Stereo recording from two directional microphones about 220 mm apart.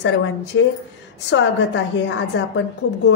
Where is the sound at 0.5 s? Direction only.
60° left (ahead or behind).